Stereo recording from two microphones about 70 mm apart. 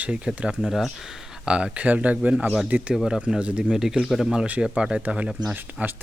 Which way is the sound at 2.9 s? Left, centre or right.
Centre.